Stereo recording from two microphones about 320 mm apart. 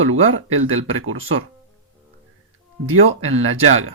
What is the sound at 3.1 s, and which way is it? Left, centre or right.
Speech, right.